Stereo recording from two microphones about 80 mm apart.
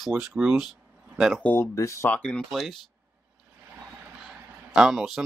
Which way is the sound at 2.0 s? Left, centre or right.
Centre.